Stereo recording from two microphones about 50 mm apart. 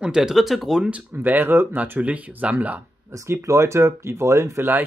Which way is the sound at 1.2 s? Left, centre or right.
Right.